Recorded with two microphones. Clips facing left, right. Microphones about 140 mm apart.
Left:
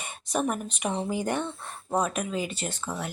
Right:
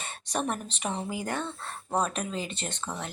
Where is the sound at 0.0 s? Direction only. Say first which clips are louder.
Left 3 dB; 10° left (ahead or behind).